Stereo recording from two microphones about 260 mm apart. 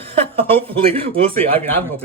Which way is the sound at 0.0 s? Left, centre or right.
Right.